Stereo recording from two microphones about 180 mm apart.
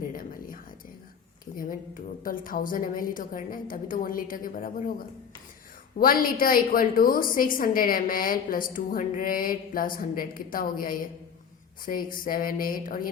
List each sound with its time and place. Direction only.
0.0 s a sound: 50° left (ahead or behind)
1.5 s a woman's voice: 50° left (ahead or behind)
6.0 s a woman's voice: 50° left (ahead or behind)